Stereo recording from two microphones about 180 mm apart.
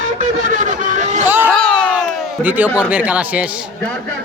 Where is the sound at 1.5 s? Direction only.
5° left (ahead or behind).